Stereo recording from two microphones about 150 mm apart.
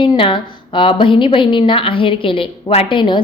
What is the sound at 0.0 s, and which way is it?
A woman's voice, 35° left (ahead or behind).